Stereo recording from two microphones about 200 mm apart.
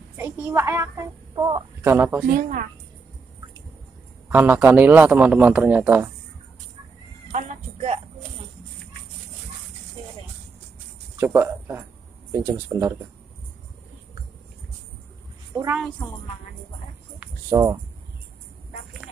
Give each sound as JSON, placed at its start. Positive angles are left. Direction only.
{"t": 0.2, "sound": "a woman's voice", "side_deg": -10}
{"t": 2.2, "sound": "a woman's voice", "side_deg": -40}
{"t": 4.3, "sound": "a man's voice", "side_deg": -10}
{"t": 7.3, "sound": "a sound", "side_deg": -35}
{"t": 11.1, "sound": "a man's voice", "side_deg": -10}
{"t": 15.5, "sound": "a woman's voice", "side_deg": -10}
{"t": 17.2, "sound": "a sound", "side_deg": -15}